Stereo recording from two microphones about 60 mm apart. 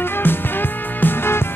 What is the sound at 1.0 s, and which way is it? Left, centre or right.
Music, left.